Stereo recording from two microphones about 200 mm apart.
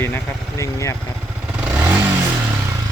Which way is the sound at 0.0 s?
15° left (ahead or behind).